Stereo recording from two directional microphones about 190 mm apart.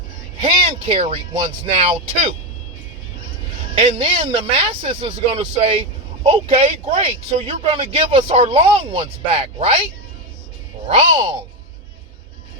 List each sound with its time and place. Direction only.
0.4 s speech: 30° right (ahead or behind)
3.8 s speech: 30° right (ahead or behind)
10.8 s speech: 35° right (ahead or behind)